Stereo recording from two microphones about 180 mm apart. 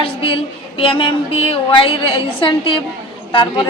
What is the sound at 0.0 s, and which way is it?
A woman's voice, 30° left (ahead or behind).